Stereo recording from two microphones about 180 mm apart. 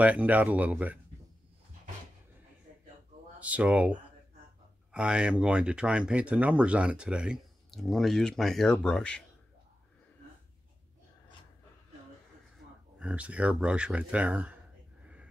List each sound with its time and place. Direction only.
0.0 s speech: 10° right (ahead or behind)
3.3 s speech: 5° right (ahead or behind)
4.9 s speech: 5° right (ahead or behind)
13.0 s speech: 5° right (ahead or behind)